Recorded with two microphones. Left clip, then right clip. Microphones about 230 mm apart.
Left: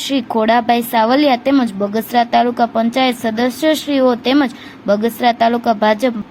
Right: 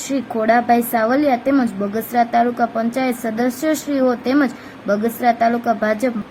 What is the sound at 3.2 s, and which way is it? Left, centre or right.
Speech, left.